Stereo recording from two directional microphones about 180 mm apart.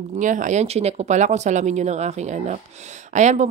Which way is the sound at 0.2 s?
45° right (ahead or behind).